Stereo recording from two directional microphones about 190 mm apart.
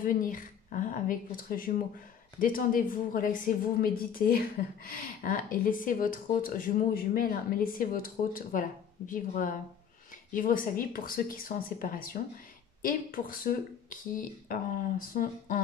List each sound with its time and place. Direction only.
0.0 s a woman's voice: 45° left (ahead or behind)